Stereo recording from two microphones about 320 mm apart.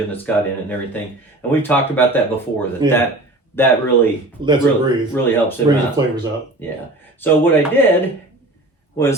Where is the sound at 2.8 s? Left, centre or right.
Centre.